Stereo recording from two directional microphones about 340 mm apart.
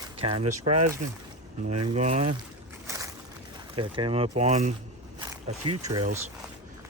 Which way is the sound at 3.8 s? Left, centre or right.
Centre.